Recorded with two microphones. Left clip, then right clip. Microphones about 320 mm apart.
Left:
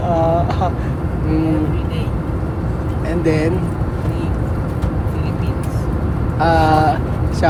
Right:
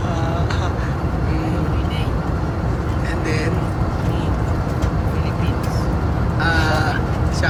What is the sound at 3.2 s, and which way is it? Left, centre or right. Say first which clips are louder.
Speech: left 7 dB; centre.